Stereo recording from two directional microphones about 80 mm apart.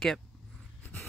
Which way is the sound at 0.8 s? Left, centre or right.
Left.